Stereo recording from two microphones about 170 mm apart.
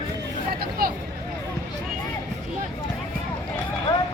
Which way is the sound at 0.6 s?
65° right (ahead or behind).